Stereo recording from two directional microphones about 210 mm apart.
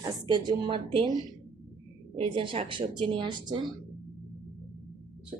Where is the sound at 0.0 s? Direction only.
20° right (ahead or behind).